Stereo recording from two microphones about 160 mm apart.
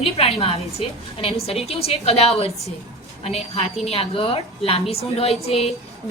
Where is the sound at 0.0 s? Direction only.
40° left (ahead or behind).